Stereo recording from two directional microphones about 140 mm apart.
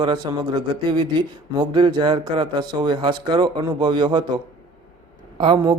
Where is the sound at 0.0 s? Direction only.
35° right (ahead or behind).